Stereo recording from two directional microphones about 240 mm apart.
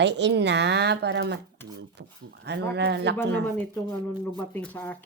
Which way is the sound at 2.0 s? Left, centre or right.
Right.